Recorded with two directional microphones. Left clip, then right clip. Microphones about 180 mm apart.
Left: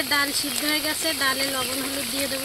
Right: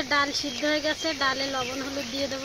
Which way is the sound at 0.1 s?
20° left (ahead or behind).